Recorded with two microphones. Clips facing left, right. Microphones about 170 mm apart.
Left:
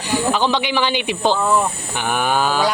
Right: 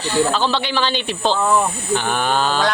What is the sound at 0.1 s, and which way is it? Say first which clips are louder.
Speech: even; 15° left (ahead or behind).